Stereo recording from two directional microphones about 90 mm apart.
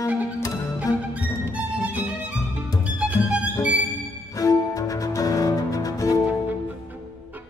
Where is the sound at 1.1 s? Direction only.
15° right (ahead or behind).